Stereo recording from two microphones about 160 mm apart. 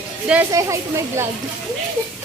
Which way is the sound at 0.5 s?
20° right (ahead or behind).